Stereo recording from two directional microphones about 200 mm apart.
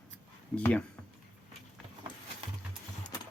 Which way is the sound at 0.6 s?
10° left (ahead or behind).